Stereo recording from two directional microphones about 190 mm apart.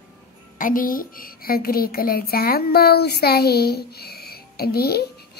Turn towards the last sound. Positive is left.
turn(degrees=55)  # may be behind; listen again after turning